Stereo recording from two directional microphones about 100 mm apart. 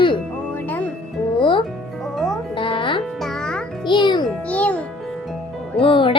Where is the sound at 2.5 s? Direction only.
55° left (ahead or behind).